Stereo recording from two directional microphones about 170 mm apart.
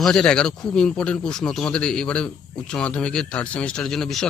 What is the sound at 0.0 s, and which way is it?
Speech, 5° left (ahead or behind).